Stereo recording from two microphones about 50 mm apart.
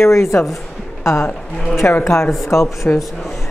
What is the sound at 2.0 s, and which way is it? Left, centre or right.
Speech, left.